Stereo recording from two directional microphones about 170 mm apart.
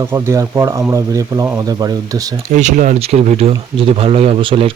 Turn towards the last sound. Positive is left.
turn(degrees=-30)  # may be behind; listen again after turning